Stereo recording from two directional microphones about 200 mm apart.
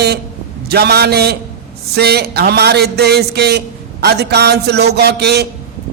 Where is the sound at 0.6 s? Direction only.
50° right (ahead or behind).